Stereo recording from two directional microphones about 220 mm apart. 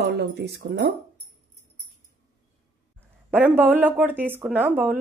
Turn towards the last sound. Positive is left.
turn(degrees=-10)  # may be behind; listen again after turning